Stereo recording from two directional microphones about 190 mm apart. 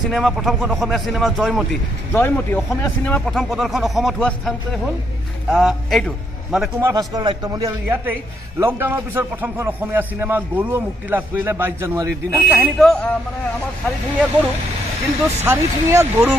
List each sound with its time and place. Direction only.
0.1 s a man's voice: centre (ahead or behind)
6.8 s a man's voice: 20° right (ahead or behind); by 13.1 s centre (ahead or behind)
15.4 s a man's voice: 15° right (ahead or behind)